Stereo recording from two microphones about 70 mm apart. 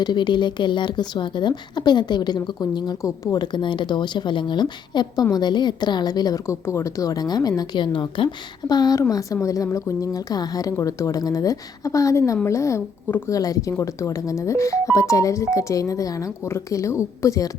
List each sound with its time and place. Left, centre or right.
0.0 s speech: left
5.2 s speech: left
6.4 s a woman's voice: left
9.0 s a woman's voice: left
10.8 s speech: left
13.2 s speech: left